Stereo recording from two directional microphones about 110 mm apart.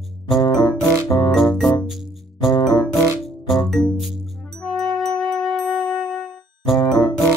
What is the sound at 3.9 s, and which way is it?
Music, centre (ahead or behind).